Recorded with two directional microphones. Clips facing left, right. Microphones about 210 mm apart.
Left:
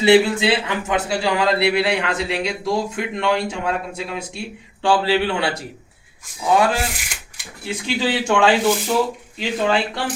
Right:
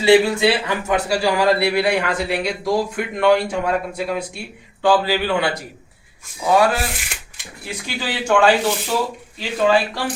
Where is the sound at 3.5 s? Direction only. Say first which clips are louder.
Right 3 dB; 25° left (ahead or behind).